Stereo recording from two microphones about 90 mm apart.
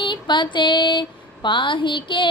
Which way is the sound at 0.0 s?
60° left (ahead or behind).